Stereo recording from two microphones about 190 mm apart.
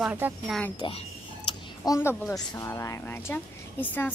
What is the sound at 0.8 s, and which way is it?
Speech, 30° left (ahead or behind).